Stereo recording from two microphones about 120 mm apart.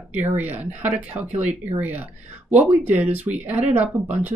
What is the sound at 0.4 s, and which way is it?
Speech, 15° right (ahead or behind).